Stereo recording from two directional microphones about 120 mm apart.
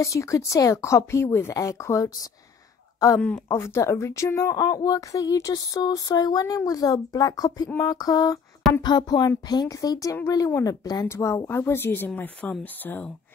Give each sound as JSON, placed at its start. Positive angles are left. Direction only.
{"t": 0.0, "sound": "speech", "side_deg": 25}
{"t": 3.4, "sound": "speech", "side_deg": 20}